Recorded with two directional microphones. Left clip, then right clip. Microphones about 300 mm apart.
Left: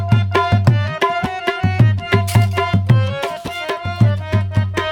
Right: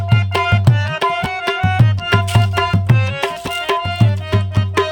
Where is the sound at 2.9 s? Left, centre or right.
Centre.